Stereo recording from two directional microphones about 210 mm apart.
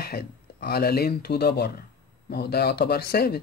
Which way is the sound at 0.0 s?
50° left (ahead or behind).